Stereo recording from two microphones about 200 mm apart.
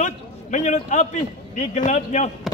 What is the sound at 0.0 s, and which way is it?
A man's voice, 35° left (ahead or behind).